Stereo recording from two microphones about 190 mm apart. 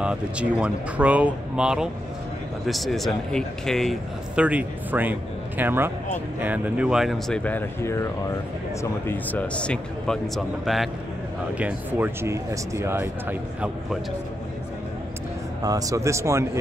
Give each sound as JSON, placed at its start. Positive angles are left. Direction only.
{"t": 0.0, "sound": "a man's voice", "side_deg": -5}
{"t": 15.6, "sound": "speech", "side_deg": -20}